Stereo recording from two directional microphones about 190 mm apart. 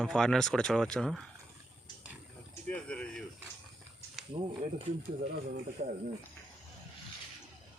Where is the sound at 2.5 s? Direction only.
5° left (ahead or behind).